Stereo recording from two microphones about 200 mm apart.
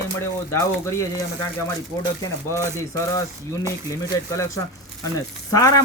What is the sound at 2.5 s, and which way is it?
Speech, 15° left (ahead or behind).